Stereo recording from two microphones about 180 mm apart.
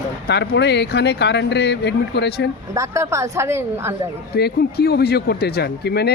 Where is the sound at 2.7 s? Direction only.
15° right (ahead or behind).